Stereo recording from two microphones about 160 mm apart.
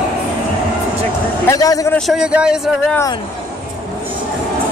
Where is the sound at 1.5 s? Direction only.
20° left (ahead or behind).